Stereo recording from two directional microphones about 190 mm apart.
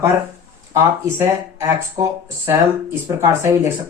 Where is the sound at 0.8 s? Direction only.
15° right (ahead or behind).